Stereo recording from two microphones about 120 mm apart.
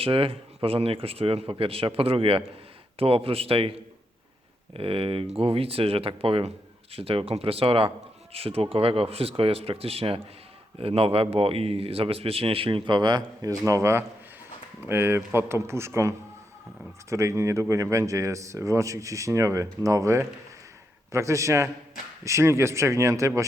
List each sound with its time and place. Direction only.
0.0 s a man's voice: 50° right (ahead or behind); by 23.5 s 25° right (ahead or behind)